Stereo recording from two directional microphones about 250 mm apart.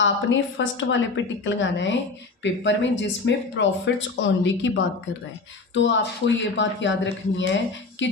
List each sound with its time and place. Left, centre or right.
0.0 s speech: left